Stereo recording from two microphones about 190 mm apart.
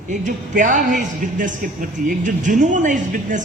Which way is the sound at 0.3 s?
45° right (ahead or behind).